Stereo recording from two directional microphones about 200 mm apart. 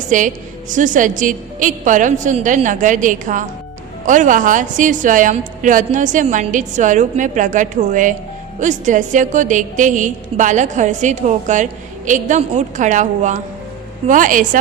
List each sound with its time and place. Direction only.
0.1 s a woman's voice: 40° right (ahead or behind)